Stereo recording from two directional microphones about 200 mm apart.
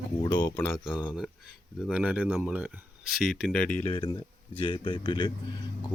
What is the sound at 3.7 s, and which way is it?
Speech, 25° left (ahead or behind).